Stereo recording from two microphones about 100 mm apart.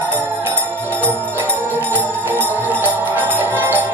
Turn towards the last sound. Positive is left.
turn(degrees=-20)  # may be behind; listen again after turning